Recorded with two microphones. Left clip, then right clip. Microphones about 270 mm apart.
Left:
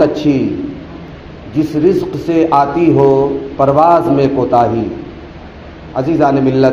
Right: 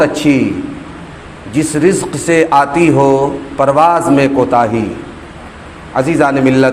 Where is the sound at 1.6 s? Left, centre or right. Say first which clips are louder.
Even; right.